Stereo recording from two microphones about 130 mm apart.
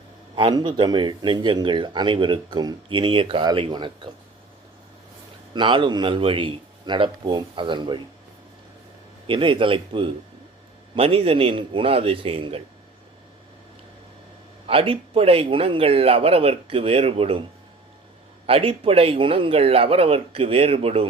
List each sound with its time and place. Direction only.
0.3 s speech: 40° right (ahead or behind)
5.5 s speech: 40° right (ahead or behind)
9.2 s speech: 40° right (ahead or behind)
14.7 s speech: 45° right (ahead or behind)
18.4 s speech: 45° right (ahead or behind)